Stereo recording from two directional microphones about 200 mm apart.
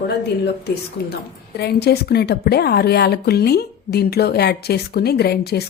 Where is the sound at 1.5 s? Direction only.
55° left (ahead or behind).